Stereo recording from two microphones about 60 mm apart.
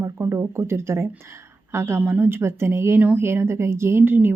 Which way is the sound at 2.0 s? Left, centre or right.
Right.